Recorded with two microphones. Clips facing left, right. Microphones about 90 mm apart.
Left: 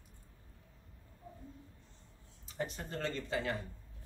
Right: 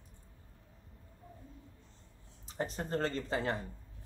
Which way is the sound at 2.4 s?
40° right (ahead or behind).